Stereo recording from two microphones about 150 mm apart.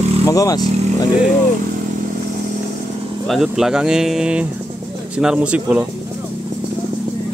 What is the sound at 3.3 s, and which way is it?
Speech, centre (ahead or behind).